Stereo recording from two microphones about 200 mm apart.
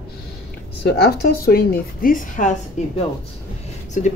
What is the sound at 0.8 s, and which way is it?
A woman's voice, 55° left (ahead or behind).